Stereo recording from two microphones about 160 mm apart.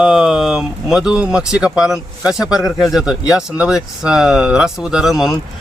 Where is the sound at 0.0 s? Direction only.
Centre (ahead or behind).